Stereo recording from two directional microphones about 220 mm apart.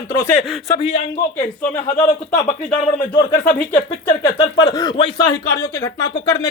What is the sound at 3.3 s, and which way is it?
Speech, 10° left (ahead or behind).